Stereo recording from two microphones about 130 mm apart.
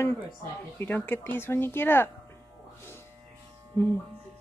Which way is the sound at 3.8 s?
15° left (ahead or behind).